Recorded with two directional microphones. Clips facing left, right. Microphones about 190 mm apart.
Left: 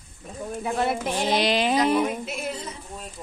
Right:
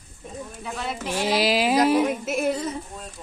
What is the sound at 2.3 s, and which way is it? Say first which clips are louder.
Speech: right 8 dB; 50° right (ahead or behind).